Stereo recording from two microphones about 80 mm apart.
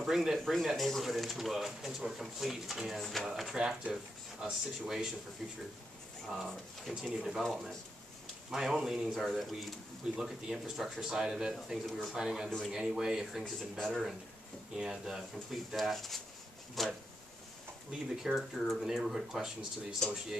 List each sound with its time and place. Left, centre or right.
0.0 s speech: centre
7.0 s speech: centre
12.4 s speech: centre
12.7 s speech: centre
13.4 s speech: centre
14.8 s speech: centre
17.9 s speech: centre